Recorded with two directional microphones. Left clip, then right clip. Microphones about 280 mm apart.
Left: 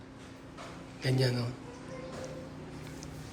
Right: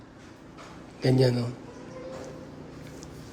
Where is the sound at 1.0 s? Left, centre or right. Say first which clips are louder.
Right 8 dB; centre.